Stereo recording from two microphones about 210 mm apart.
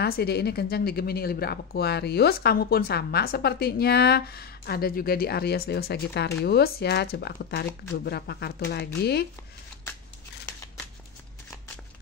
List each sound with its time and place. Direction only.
0.0 s speech: 50° left (ahead or behind)